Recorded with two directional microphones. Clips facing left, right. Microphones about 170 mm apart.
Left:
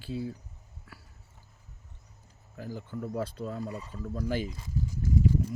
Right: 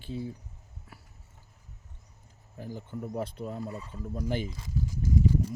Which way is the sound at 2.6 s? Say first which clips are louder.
Left 1 dB; 20° right (ahead or behind).